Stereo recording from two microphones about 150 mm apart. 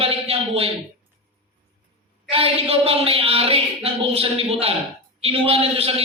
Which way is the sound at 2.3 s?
40° right (ahead or behind).